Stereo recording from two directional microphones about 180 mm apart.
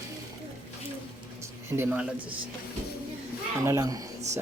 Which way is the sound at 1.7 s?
10° right (ahead or behind).